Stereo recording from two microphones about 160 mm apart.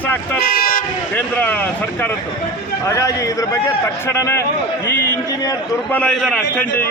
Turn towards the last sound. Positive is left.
turn(degrees=5)  # may be behind; listen again after turning